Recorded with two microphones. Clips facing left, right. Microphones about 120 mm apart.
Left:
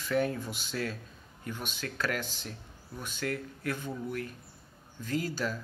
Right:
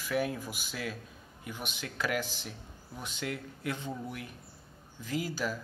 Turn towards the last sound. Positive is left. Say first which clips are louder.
# left 1 dB
turn(degrees=-10)  # may be behind; listen again after turning